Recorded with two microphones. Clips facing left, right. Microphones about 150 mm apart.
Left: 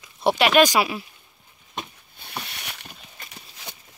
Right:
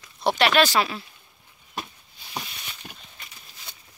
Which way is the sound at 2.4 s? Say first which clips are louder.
Left 3 dB; 70° left (ahead or behind).